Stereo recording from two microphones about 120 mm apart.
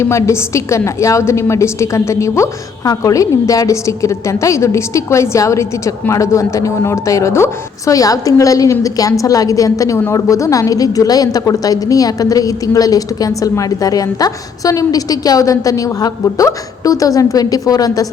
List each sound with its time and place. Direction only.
0.0 s a woman's voice: 25° left (ahead or behind)